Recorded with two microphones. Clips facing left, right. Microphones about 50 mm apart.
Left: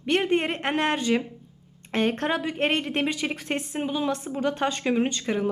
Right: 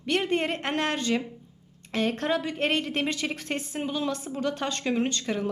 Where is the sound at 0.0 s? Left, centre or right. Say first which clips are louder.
Left 3 dB; left.